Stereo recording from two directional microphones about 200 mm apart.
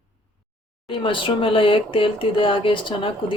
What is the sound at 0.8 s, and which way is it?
Speech, 25° left (ahead or behind).